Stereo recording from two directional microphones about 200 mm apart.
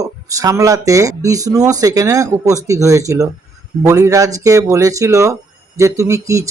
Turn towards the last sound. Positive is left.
turn(degrees=-15)  # may be behind; listen again after turning